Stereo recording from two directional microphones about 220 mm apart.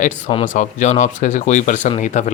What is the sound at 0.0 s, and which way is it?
Speech, 30° left (ahead or behind).